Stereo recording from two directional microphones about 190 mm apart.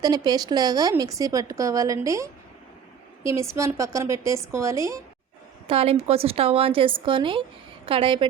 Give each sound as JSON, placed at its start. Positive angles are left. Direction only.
{"t": 0.0, "sound": "a woman's voice", "side_deg": -20}
{"t": 5.6, "sound": "a woman's voice", "side_deg": -30}